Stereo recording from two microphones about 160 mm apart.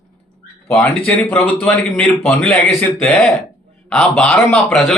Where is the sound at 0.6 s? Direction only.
15° left (ahead or behind).